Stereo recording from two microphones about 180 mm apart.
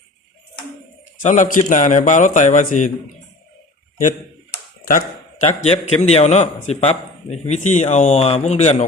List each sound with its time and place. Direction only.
1.2 s a man's voice: 45° left (ahead or behind)
5.6 s a man's voice: 40° left (ahead or behind)